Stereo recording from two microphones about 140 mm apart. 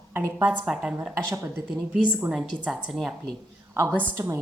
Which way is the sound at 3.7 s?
20° right (ahead or behind).